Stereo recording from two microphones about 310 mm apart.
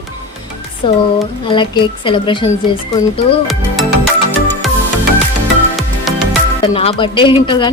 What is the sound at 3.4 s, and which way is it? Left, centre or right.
Speech, centre.